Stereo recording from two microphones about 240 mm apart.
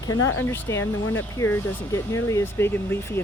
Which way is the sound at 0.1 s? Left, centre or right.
Left.